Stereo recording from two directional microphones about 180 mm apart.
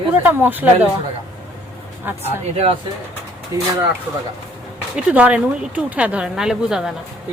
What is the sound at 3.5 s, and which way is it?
Speech, 15° right (ahead or behind).